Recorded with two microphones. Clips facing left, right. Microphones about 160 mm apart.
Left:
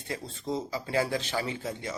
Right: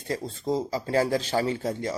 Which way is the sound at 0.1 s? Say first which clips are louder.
Right 6 dB; 40° right (ahead or behind).